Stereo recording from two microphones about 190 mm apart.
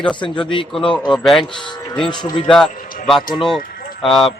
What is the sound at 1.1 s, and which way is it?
Speech, centre (ahead or behind).